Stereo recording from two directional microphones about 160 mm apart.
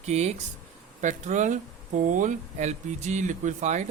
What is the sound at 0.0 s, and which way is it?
Speech, 45° right (ahead or behind).